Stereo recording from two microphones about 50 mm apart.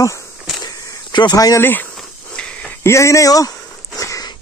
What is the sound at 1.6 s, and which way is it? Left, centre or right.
Speech, left.